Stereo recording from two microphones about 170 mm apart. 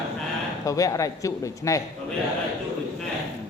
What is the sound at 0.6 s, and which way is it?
Speech, 20° left (ahead or behind).